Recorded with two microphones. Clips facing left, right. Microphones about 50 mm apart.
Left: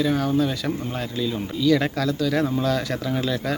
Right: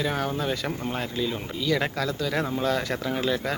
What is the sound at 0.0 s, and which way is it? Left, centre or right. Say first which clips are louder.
Speech: left 6 dB; right.